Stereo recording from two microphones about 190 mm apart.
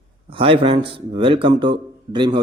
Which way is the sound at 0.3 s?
30° right (ahead or behind).